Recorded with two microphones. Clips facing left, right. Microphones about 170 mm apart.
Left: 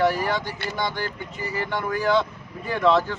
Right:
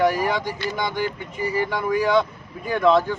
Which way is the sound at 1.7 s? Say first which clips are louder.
Even; 5° right (ahead or behind).